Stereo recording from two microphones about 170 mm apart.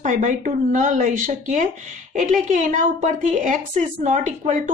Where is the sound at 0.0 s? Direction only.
50° right (ahead or behind).